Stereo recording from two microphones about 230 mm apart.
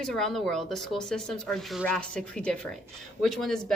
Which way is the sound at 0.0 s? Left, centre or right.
Centre.